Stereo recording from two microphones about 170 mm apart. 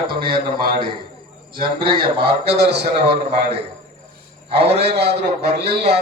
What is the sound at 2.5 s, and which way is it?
Speech, 75° right (ahead or behind).